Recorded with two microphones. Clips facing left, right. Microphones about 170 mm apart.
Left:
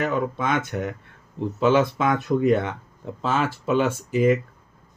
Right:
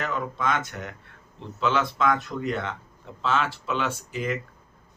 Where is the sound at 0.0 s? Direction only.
50° left (ahead or behind).